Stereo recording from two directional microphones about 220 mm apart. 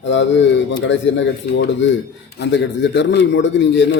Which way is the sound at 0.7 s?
55° left (ahead or behind).